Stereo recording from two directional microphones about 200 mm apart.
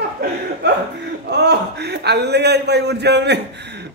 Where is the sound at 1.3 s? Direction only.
55° right (ahead or behind).